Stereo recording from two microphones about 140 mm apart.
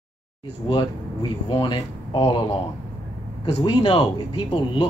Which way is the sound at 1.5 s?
35° left (ahead or behind).